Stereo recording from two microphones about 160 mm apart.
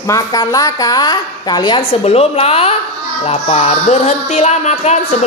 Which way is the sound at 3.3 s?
40° left (ahead or behind).